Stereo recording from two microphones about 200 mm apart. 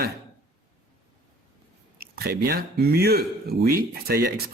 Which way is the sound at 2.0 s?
50° right (ahead or behind).